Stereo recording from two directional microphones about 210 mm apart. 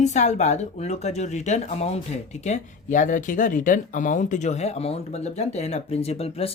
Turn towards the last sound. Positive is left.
turn(degrees=30)  # may be behind; listen again after turning